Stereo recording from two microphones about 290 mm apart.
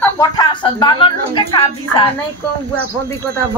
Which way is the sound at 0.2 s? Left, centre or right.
Centre.